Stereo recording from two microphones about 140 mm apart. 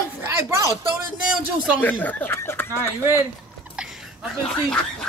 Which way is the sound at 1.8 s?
10° left (ahead or behind).